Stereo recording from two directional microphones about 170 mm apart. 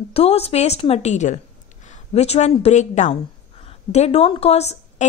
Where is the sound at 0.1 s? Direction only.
35° left (ahead or behind).